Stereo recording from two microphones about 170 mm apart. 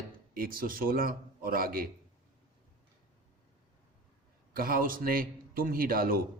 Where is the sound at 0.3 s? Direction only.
60° right (ahead or behind).